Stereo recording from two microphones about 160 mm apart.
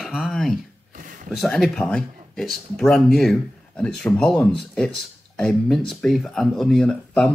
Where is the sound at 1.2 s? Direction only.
Centre (ahead or behind).